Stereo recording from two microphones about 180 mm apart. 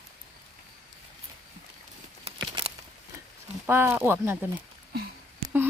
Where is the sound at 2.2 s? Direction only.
35° right (ahead or behind).